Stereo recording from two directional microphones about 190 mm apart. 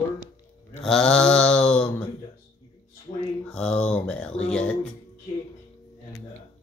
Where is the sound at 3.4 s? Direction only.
5° left (ahead or behind).